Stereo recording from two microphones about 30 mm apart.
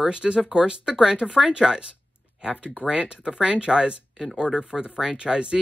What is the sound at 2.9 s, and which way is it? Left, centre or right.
Speech, right.